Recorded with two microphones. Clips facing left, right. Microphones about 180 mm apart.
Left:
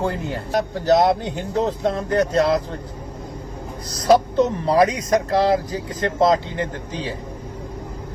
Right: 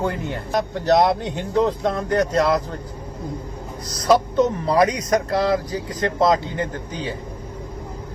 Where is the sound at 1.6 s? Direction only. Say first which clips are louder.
Right 1 dB; 30° left (ahead or behind).